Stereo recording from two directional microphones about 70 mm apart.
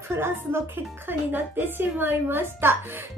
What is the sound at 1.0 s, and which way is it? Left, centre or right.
A woman's voice, right.